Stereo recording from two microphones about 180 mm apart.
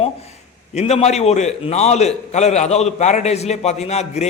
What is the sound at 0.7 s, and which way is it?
A man's voice, 35° left (ahead or behind).